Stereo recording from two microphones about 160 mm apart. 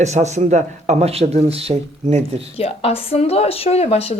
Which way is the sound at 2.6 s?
40° left (ahead or behind).